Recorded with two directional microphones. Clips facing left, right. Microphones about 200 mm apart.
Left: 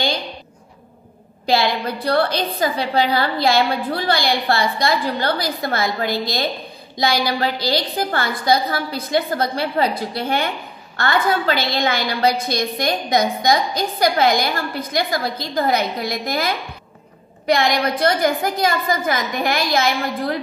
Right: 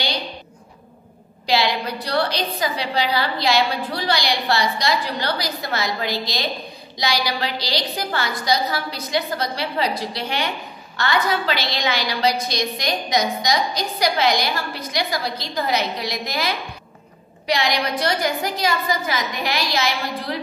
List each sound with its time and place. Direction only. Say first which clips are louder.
1.4 s a woman's voice: left 2 dB; 50° left (ahead or behind)
17.5 s a woman's voice: left 4 dB; 50° left (ahead or behind)